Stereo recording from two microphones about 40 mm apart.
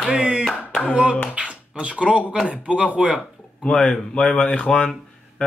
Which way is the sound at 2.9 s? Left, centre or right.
Centre.